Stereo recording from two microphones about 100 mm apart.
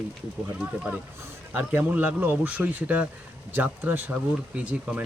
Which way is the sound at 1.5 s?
15° right (ahead or behind).